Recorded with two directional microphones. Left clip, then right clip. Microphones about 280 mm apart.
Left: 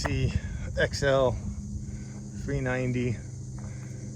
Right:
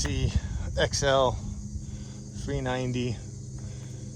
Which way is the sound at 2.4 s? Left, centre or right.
Centre.